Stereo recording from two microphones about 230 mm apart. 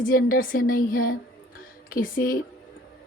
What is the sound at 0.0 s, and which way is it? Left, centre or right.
A woman's voice, left.